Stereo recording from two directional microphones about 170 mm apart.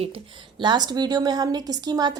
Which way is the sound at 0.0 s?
30° right (ahead or behind).